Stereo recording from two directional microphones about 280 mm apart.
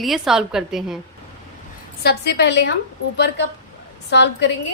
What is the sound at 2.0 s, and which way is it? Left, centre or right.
A woman's voice, left.